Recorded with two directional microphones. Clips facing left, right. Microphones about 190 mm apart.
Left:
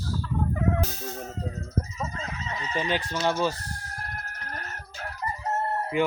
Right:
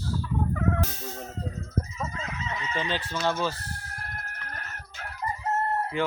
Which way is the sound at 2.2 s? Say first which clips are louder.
Even; 35° left (ahead or behind).